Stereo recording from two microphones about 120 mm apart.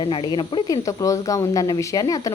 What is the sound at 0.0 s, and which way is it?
Speech, 45° left (ahead or behind).